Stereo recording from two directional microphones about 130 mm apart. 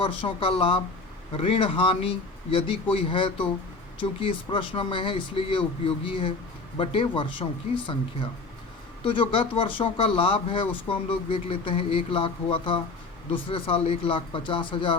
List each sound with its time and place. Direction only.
0.0 s speech: 45° left (ahead or behind)
9.0 s speech: 40° left (ahead or behind)